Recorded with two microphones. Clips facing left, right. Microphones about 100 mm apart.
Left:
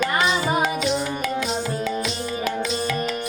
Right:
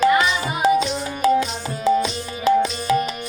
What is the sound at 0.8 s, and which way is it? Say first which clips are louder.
Music: right 2 dB; 30° right (ahead or behind).